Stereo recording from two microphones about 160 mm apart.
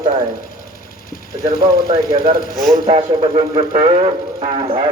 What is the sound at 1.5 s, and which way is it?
Speech, 25° right (ahead or behind).